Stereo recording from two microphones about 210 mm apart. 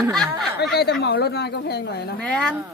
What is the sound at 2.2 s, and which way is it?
Speech, 5° left (ahead or behind).